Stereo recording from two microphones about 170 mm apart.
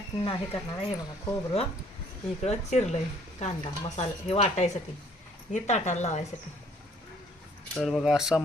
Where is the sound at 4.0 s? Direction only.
40° left (ahead or behind).